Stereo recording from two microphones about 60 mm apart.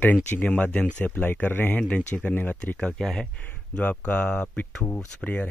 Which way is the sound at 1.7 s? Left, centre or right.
Left.